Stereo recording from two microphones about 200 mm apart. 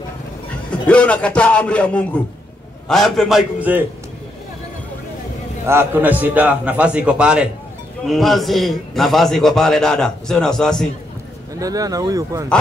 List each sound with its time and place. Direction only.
0.7 s a man's voice: 5° left (ahead or behind)
5.7 s a man's voice: 10° right (ahead or behind)
11.6 s a man's voice: 20° right (ahead or behind)